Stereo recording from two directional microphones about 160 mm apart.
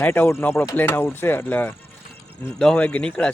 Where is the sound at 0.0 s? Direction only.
15° left (ahead or behind).